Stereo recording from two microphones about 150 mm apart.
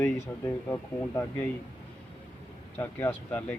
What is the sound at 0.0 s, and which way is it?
Speech, 20° left (ahead or behind).